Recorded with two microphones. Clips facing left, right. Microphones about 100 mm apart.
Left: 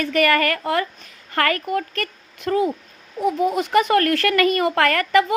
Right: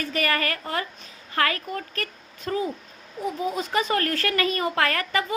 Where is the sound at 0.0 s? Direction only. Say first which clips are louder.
Left 7 dB; 60° left (ahead or behind).